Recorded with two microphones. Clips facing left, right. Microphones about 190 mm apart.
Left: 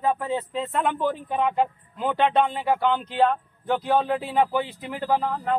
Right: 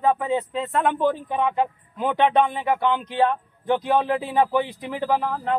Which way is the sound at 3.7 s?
15° right (ahead or behind).